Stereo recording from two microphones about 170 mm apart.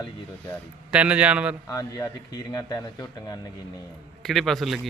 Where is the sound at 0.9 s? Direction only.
10° right (ahead or behind).